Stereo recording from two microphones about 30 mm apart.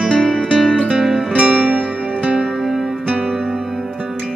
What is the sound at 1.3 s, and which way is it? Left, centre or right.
Music, right.